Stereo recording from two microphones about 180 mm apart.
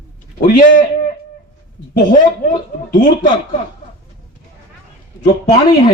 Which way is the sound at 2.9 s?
50° left (ahead or behind).